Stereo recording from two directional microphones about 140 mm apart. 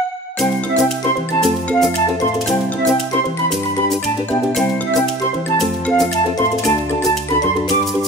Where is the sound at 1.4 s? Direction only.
Centre (ahead or behind).